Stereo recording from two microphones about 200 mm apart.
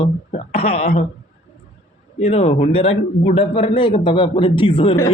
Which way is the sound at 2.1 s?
30° left (ahead or behind).